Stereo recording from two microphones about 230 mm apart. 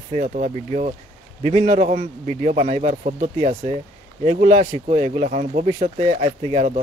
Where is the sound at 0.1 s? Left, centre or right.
Right.